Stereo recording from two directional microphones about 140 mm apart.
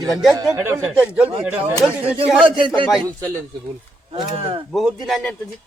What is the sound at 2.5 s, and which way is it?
Speech, 35° right (ahead or behind).